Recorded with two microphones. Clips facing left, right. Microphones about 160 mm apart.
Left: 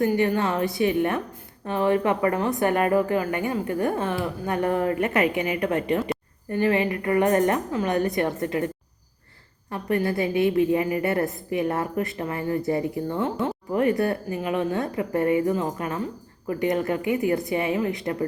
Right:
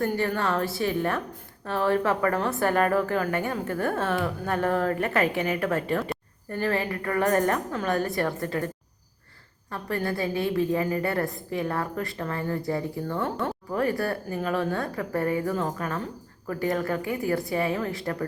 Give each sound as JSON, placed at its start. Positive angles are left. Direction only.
{"t": 0.2, "sound": "a woman's voice", "side_deg": 20}